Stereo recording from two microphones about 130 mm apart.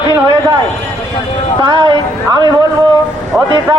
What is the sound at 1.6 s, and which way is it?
Speech, 40° right (ahead or behind).